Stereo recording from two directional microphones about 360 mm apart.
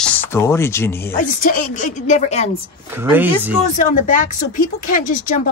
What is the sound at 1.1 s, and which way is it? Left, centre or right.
Speech, left.